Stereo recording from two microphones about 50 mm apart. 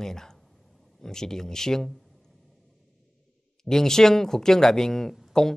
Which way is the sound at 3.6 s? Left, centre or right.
Centre.